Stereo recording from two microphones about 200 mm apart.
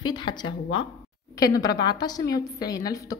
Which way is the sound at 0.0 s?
20° left (ahead or behind).